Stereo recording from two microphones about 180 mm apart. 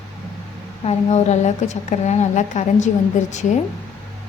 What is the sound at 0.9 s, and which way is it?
A woman's voice, 35° left (ahead or behind).